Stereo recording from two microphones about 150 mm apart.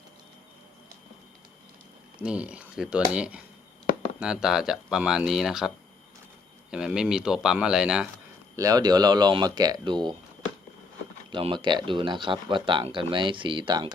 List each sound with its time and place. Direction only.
2.2 s speech: 5° right (ahead or behind)
8.5 s speech: 25° right (ahead or behind)
11.3 s speech: 35° right (ahead or behind)